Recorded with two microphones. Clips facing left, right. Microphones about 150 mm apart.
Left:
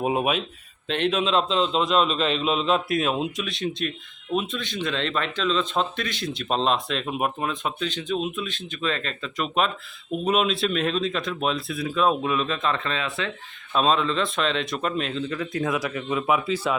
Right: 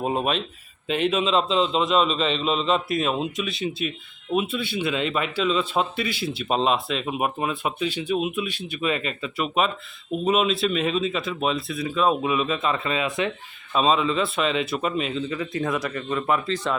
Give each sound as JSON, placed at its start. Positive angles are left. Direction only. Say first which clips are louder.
{"t": 0.0, "sound": "speech", "louder": "left 1 dB", "side_deg": 5}
{"t": 13.7, "sound": "speech", "louder": "right 1 dB", "side_deg": -5}